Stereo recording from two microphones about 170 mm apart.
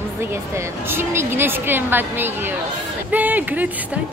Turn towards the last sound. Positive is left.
turn(degrees=-10)  # may be behind; listen again after turning